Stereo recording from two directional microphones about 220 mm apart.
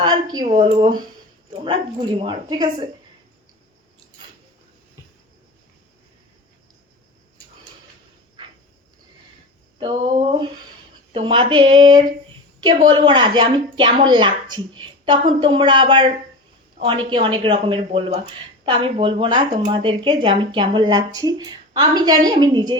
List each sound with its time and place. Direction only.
0.0 s speech: 20° right (ahead or behind)
9.8 s speech: 20° right (ahead or behind)